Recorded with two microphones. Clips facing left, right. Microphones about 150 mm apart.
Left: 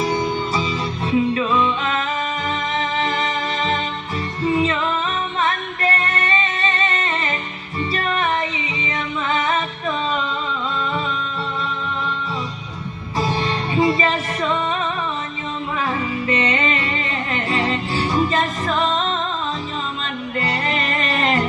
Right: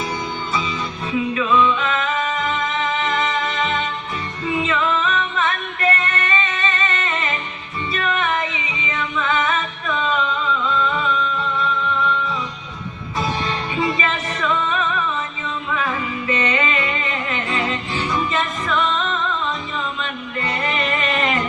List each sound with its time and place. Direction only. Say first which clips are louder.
0.0 s music: left 5 dB; 30° left (ahead or behind)
13.7 s music: left 5 dB; 30° left (ahead or behind)